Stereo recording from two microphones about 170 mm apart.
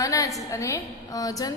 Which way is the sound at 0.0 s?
20° left (ahead or behind).